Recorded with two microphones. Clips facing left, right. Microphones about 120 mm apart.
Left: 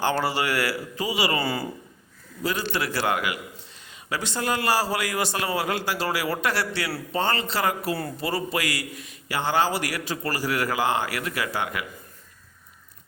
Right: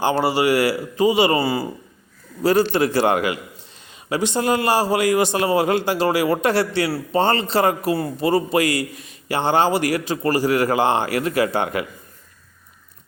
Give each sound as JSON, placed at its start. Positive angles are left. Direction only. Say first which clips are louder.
{"t": 0.0, "sound": "a man's voice", "louder": "right 6 dB", "side_deg": -15}
{"t": 1.4, "sound": "speech", "louder": "right 6 dB", "side_deg": -10}
{"t": 2.7, "sound": "a man's voice", "louder": "right 8 dB", "side_deg": -25}
{"t": 4.1, "sound": "a man's voice", "louder": "right 7 dB", "side_deg": -20}